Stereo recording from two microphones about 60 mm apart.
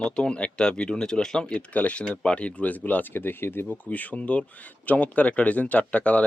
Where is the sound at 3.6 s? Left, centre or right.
Left.